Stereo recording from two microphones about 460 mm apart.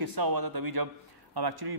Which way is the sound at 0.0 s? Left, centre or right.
Right.